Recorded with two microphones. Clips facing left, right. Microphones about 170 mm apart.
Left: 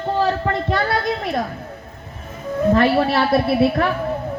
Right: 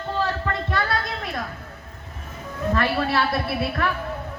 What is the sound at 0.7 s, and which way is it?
Speech, 20° left (ahead or behind).